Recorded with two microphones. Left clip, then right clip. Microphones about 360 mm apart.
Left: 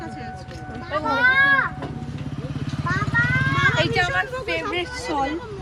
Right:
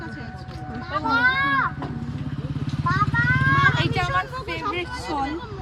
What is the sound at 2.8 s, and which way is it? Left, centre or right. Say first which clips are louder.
Vehicle: right 1 dB; centre.